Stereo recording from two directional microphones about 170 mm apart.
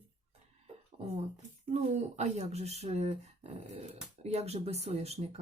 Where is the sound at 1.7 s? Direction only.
40° right (ahead or behind).